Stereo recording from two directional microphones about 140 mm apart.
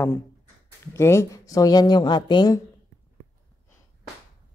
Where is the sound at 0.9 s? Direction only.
20° left (ahead or behind).